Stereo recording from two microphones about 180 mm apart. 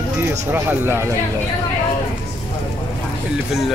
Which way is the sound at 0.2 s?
10° right (ahead or behind).